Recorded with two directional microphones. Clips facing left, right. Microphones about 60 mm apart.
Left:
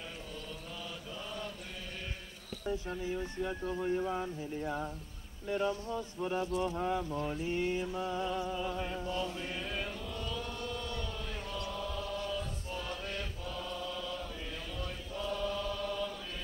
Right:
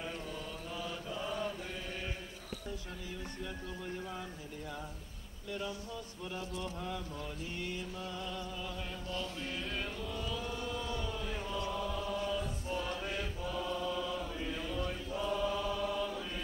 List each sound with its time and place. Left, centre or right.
0.8 s mantra: centre
2.9 s speech: left
5.5 s a sound: left; by 16.2 s centre